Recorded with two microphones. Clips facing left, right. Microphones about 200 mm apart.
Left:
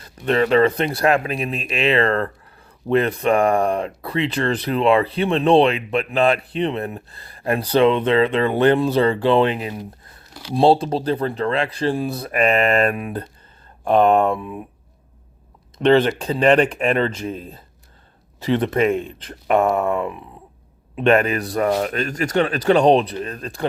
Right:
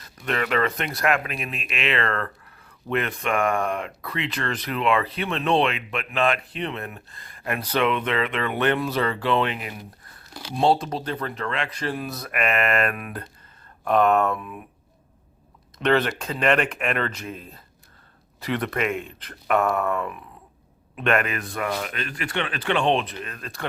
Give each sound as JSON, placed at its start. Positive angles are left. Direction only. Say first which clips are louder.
{"t": 0.2, "sound": "speech", "louder": "left 8 dB", "side_deg": 30}
{"t": 15.8, "sound": "speech", "louder": "left 7 dB", "side_deg": 30}